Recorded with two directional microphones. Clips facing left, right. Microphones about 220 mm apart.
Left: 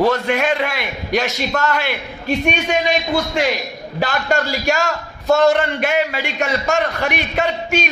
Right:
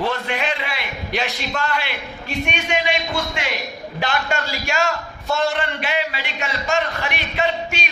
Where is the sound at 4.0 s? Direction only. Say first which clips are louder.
Left 4 dB; 40° left (ahead or behind).